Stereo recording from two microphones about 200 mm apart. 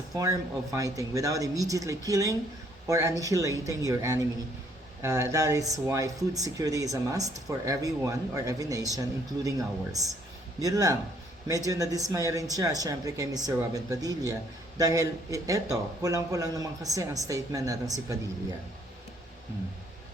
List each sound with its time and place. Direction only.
0.1 s a man's voice: 15° right (ahead or behind)